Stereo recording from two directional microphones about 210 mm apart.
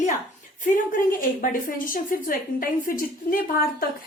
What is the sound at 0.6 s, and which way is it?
A woman's voice, 40° left (ahead or behind).